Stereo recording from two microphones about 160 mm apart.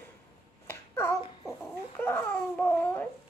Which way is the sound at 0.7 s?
15° left (ahead or behind).